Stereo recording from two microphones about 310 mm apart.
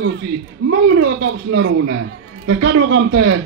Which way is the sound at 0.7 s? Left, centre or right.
Right.